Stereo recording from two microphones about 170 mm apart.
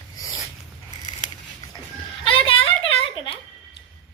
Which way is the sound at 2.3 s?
30° left (ahead or behind).